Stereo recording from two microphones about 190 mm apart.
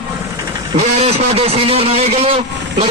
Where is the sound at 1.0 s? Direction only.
30° right (ahead or behind).